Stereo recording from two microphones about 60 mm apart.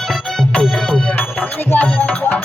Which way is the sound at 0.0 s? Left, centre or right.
Centre.